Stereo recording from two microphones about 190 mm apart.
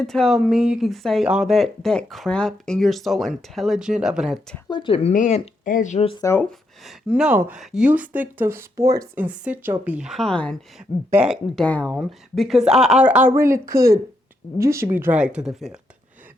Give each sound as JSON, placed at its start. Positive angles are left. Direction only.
{"t": 0.0, "sound": "speech", "side_deg": 0}
{"t": 4.7, "sound": "speech", "side_deg": 25}
{"t": 6.2, "sound": "speech", "side_deg": 10}
{"t": 6.8, "sound": "speech", "side_deg": -5}